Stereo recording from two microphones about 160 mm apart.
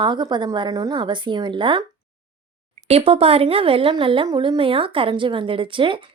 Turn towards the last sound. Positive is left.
turn(degrees=-30)  # may be behind; listen again after turning